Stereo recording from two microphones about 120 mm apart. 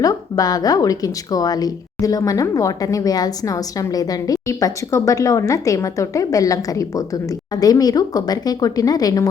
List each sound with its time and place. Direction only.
0.0 s speech: 30° left (ahead or behind)